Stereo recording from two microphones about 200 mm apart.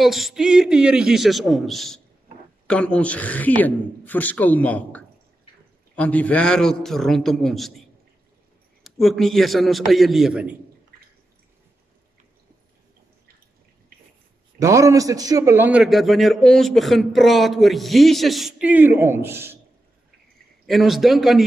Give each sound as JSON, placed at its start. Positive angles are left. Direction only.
{"t": 0.0, "sound": "a man's voice", "side_deg": 0}
{"t": 8.8, "sound": "a man's voice", "side_deg": 0}
{"t": 14.6, "sound": "a man's voice", "side_deg": -15}
{"t": 20.6, "sound": "a man's voice", "side_deg": 0}